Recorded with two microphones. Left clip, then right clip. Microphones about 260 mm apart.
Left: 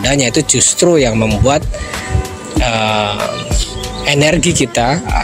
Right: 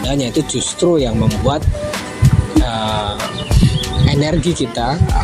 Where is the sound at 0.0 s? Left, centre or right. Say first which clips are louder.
Left 5 dB; left.